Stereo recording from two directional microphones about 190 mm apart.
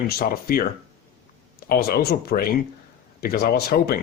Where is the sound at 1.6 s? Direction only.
55° left (ahead or behind).